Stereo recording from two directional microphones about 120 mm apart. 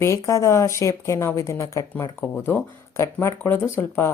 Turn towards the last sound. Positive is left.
turn(degrees=20)  # may be behind; listen again after turning